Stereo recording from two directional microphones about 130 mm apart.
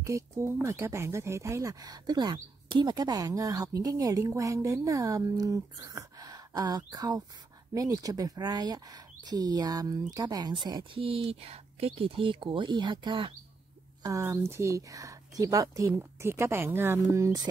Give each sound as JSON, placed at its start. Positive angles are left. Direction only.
{"t": 0.0, "sound": "speech", "side_deg": -25}
{"t": 14.0, "sound": "speech", "side_deg": -25}